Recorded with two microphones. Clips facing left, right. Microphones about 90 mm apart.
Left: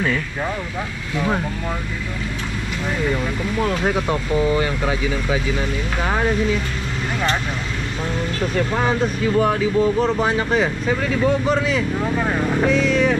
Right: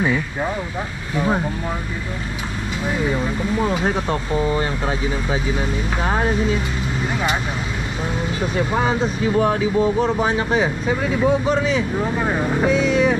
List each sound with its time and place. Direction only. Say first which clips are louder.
0.0 s speech: right 2 dB; 15° right (ahead or behind)
2.9 s speech: right 1 dB; 15° right (ahead or behind)
4.6 s speech: left 1 dB; 25° right (ahead or behind)
8.4 s speech: even; 10° right (ahead or behind)